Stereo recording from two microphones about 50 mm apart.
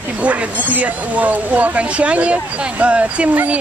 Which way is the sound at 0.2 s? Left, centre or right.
Right.